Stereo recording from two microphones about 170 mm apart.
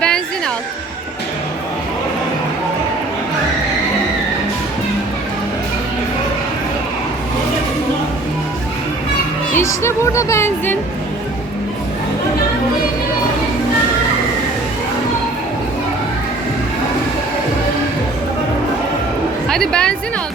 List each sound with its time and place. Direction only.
0.0 s a sound: 5° left (ahead or behind)
9.6 s music: 15° left (ahead or behind)
19.5 s music: 5° left (ahead or behind)